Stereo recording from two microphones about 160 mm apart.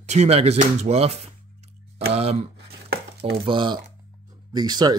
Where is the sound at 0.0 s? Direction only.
45° right (ahead or behind).